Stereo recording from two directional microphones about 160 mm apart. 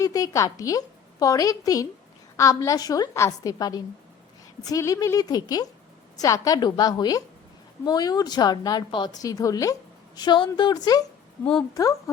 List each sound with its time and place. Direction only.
0.0 s a woman's voice: 20° left (ahead or behind)